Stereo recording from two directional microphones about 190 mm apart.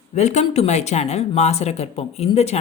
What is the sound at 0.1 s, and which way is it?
Speech, 35° left (ahead or behind).